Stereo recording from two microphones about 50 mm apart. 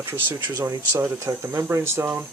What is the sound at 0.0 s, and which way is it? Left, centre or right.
Speech, right.